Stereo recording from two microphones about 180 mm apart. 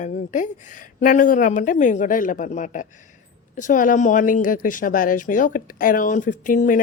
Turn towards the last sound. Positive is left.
turn(degrees=45)  # may be behind; listen again after turning